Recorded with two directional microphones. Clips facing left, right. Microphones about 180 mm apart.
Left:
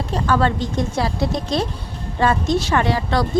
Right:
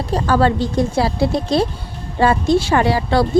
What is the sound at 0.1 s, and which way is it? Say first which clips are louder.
A woman's voice: right 3 dB; 35° right (ahead or behind).